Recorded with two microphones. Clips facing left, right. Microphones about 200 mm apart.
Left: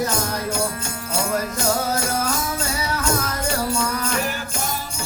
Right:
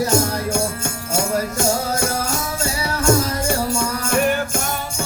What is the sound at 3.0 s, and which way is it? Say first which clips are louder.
Music: right 9 dB; 50° right (ahead or behind).